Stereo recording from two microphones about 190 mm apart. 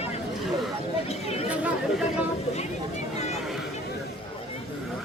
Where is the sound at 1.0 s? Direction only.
35° left (ahead or behind).